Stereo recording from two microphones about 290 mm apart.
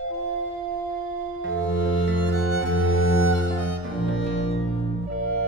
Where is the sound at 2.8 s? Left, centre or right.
Left.